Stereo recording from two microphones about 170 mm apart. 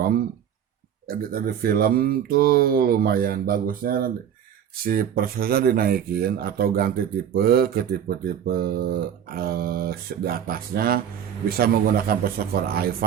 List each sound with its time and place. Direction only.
1.0 s speech: 60° right (ahead or behind)